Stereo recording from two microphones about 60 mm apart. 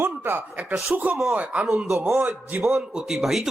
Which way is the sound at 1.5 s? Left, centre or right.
Centre.